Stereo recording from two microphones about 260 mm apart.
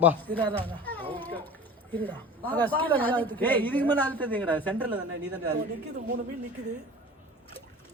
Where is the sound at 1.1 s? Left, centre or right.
Centre.